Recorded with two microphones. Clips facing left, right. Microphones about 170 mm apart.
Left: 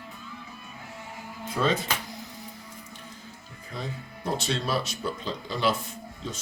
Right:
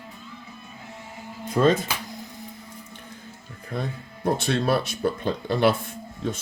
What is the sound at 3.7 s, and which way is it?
Speech, 55° right (ahead or behind).